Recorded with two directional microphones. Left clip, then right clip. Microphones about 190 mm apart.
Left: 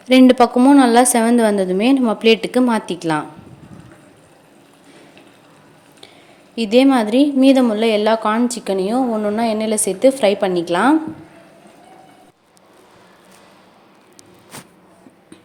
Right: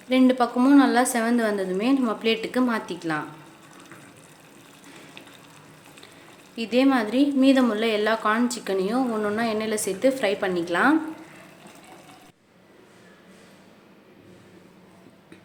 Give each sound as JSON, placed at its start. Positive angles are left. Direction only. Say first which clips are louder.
{"t": 0.1, "sound": "a woman's voice", "louder": "left 10 dB", "side_deg": 35}
{"t": 6.6, "sound": "a woman's voice", "louder": "left 8 dB", "side_deg": 30}